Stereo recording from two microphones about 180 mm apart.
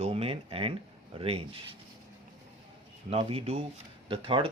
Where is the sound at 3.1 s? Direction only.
35° right (ahead or behind).